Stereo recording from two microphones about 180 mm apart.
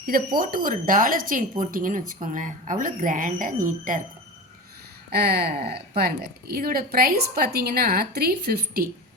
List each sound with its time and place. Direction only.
0.0 s speech: 55° right (ahead or behind)
5.1 s a woman's voice: 60° right (ahead or behind)